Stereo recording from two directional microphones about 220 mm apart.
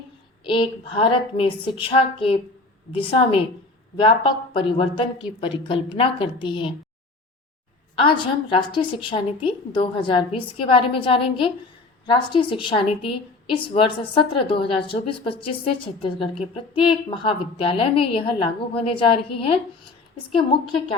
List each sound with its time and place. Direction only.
0.4 s a woman's voice: 20° left (ahead or behind)
7.9 s a woman's voice: 25° left (ahead or behind)